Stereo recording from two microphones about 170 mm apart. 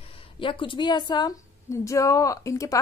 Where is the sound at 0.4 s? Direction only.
30° left (ahead or behind).